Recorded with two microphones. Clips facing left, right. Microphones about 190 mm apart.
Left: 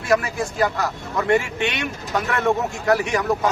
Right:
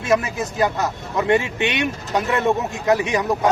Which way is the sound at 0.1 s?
20° right (ahead or behind).